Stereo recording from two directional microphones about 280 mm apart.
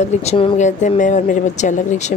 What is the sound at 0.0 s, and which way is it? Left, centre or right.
Speech, left.